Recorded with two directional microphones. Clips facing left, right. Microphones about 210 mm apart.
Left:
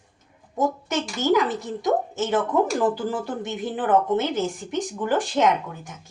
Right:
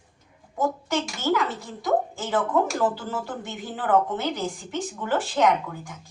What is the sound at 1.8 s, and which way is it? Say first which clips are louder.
Speech: left 1 dB; 20° left (ahead or behind).